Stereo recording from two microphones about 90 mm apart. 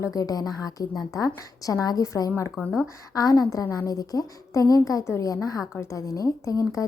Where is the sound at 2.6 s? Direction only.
25° left (ahead or behind).